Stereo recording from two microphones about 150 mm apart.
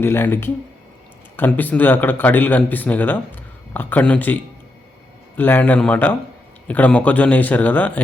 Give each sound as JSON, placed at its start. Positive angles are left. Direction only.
{"t": 0.0, "sound": "speech", "side_deg": 15}
{"t": 5.4, "sound": "speech", "side_deg": 15}